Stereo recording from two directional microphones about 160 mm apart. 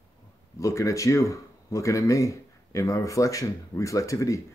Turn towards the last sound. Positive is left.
turn(degrees=20)  # may be behind; listen again after turning